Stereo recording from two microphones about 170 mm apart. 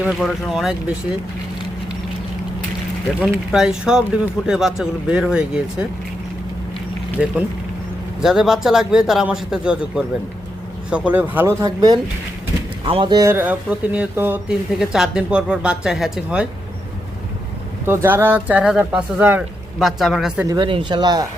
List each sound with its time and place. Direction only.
0.0 s a man's voice: centre (ahead or behind)
3.2 s a man's voice: 5° right (ahead or behind)
7.2 s a man's voice: 5° right (ahead or behind)
11.6 s speech: 25° right (ahead or behind)
13.3 s a man's voice: 10° right (ahead or behind)
17.8 s speech: 15° right (ahead or behind)
20.5 s speech: 30° right (ahead or behind)